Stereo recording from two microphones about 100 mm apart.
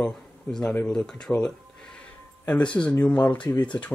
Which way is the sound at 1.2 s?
5° left (ahead or behind).